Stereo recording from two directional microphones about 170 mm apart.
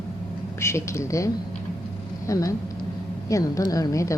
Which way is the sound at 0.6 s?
15° left (ahead or behind).